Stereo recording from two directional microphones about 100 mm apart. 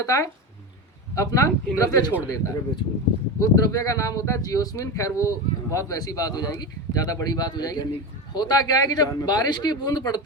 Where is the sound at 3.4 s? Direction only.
35° left (ahead or behind).